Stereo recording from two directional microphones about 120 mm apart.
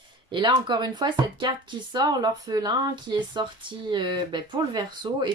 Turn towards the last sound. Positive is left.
turn(degrees=-40)  # may be behind; listen again after turning